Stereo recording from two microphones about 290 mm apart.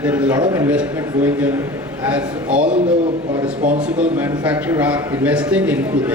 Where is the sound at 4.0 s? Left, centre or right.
Centre.